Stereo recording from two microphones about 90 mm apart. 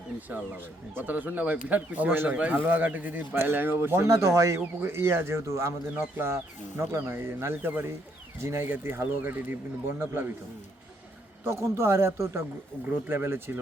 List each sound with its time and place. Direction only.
0.3 s speech: 20° right (ahead or behind)
11.4 s speech: 30° right (ahead or behind)